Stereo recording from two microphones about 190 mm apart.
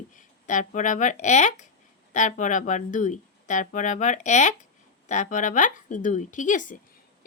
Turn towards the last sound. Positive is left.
turn(degrees=40)  # may be behind; listen again after turning